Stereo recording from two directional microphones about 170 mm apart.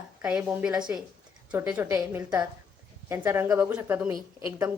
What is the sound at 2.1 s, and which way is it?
A woman's voice, 20° right (ahead or behind).